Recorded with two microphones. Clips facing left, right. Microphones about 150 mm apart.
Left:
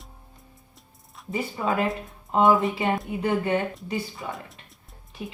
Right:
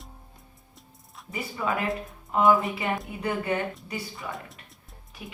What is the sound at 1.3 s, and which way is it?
A woman's voice, 25° left (ahead or behind).